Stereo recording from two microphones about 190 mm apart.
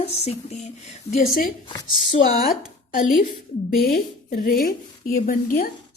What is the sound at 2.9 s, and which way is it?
A woman's voice, 45° left (ahead or behind).